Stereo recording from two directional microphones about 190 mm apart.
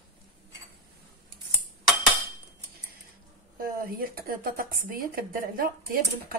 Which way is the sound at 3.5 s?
50° right (ahead or behind).